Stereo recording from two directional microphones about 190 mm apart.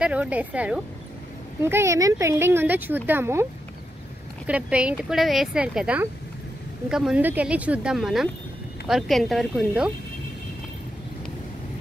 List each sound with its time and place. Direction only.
0.0 s speech: 5° right (ahead or behind)
4.5 s a woman's voice: 5° right (ahead or behind)